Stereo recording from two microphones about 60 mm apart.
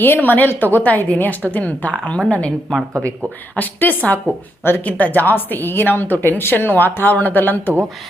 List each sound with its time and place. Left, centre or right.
0.0 s a woman's voice: left
3.6 s a woman's voice: left
4.6 s a woman's voice: left